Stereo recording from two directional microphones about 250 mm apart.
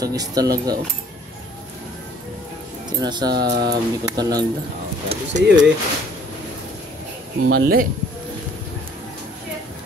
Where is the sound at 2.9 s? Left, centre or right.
Centre.